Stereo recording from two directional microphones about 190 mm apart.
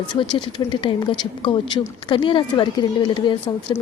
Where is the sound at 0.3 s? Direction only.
25° left (ahead or behind).